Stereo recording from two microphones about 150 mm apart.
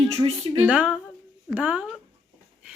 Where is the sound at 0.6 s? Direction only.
10° right (ahead or behind).